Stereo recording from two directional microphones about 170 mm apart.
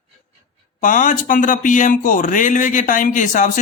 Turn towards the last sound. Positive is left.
turn(degrees=50)  # may be behind; listen again after turning